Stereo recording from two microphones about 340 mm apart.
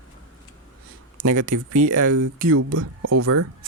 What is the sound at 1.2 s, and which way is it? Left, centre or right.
Speech, right.